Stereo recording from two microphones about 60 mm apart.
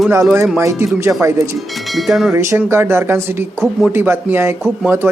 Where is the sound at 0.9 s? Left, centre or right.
Right.